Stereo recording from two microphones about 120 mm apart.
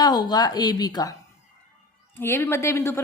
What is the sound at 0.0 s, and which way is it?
A woman's voice, 35° left (ahead or behind).